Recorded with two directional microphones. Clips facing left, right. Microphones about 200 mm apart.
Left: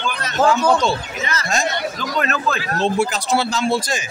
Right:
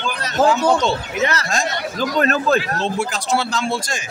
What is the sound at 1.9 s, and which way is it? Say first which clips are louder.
Speech: right 4 dB; 40° right (ahead or behind).